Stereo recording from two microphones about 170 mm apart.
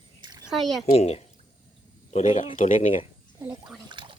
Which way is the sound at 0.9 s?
40° left (ahead or behind).